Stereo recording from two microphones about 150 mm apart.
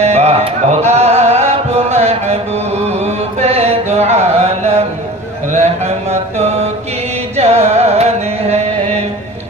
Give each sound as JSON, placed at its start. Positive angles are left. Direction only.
{"t": 0.0, "sound": "music", "side_deg": -45}
{"t": 2.8, "sound": "mantra", "side_deg": -45}
{"t": 5.5, "sound": "a sound", "side_deg": -45}
{"t": 7.3, "sound": "music", "side_deg": -45}